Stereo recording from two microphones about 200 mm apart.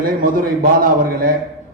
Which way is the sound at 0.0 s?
45° right (ahead or behind).